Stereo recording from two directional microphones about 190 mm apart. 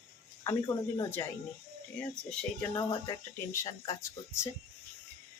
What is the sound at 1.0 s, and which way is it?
Speech, 15° left (ahead or behind).